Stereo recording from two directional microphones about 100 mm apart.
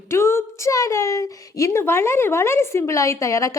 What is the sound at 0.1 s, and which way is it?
A woman's voice, 25° left (ahead or behind).